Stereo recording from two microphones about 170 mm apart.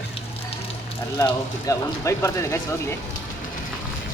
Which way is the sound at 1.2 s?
15° left (ahead or behind).